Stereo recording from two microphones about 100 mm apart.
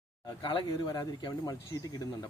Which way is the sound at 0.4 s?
50° left (ahead or behind).